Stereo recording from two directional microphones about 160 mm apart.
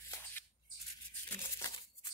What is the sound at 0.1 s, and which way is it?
Shuffle, 10° left (ahead or behind).